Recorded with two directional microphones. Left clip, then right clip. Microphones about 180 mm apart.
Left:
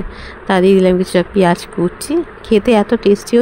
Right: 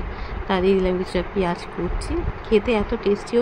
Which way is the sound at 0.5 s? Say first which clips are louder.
Left 9 dB; 50° left (ahead or behind).